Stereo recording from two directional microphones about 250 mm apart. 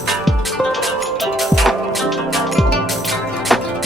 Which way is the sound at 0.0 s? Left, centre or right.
Centre.